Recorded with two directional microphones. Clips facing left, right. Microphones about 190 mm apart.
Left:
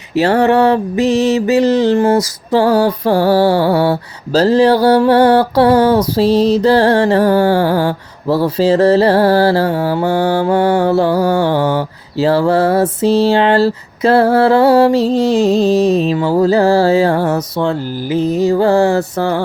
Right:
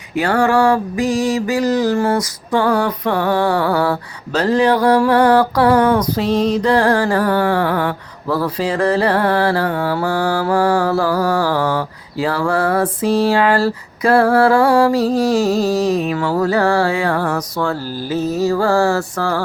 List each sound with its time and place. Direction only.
0.2 s mantra: 25° left (ahead or behind)